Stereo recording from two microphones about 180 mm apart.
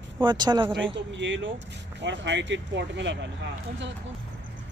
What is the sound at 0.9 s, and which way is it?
Speech, 90° right.